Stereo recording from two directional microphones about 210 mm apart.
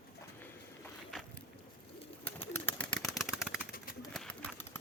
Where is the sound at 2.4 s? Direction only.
10° left (ahead or behind).